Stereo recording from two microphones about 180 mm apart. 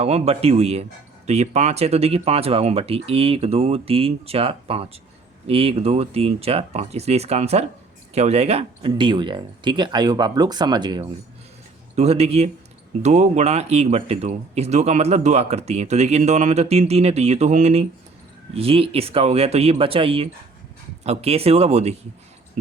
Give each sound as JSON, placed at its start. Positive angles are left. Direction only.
{"t": 0.0, "sound": "speech", "side_deg": -35}
{"t": 11.9, "sound": "speech", "side_deg": -35}